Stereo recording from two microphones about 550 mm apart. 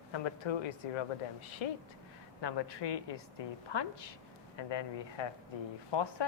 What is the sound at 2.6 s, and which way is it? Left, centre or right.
Speech, left.